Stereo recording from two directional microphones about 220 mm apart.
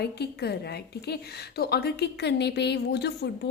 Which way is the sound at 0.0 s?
45° left (ahead or behind).